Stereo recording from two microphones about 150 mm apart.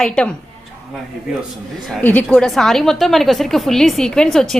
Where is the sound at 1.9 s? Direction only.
10° left (ahead or behind).